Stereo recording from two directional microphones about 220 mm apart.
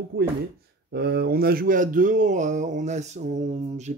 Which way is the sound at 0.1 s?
45° right (ahead or behind).